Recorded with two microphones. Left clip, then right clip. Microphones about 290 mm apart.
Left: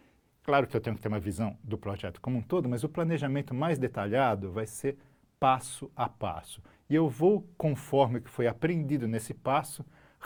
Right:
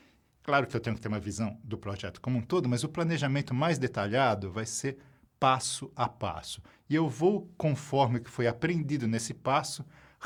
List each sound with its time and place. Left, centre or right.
0.4 s speech: right